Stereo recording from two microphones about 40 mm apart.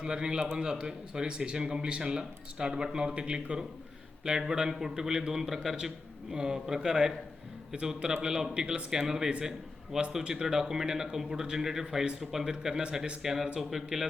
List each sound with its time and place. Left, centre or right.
0.0 s a man's voice: centre